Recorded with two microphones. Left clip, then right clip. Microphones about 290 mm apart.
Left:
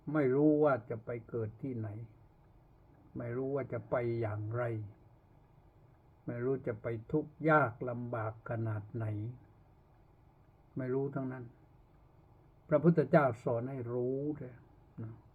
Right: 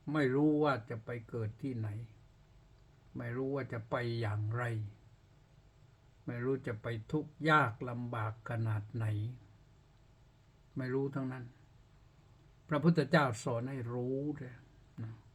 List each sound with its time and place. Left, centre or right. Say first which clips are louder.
0.3 s speech: left 3 dB; right
3.2 s speech: left 2 dB; centre
6.2 s speech: left 2 dB; right
10.8 s speech: left 1 dB; centre
12.6 s speech: left 4 dB; centre